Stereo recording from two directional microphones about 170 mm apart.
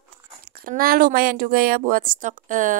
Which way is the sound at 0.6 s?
55° right (ahead or behind).